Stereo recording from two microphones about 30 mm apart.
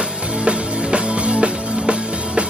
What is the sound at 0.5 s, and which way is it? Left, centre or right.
Music, right.